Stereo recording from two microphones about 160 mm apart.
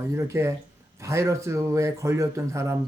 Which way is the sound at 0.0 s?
20° right (ahead or behind).